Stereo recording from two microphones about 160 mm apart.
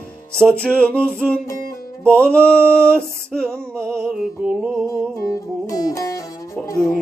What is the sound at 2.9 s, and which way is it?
Music, 5° left (ahead or behind).